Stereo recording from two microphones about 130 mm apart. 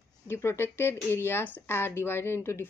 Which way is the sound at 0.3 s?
20° left (ahead or behind).